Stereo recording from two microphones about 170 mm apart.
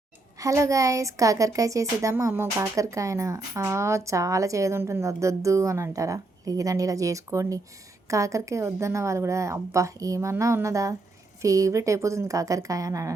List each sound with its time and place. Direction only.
0.3 s a woman's voice: 20° right (ahead or behind)